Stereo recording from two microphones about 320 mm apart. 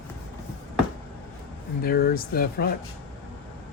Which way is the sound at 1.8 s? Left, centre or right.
Left.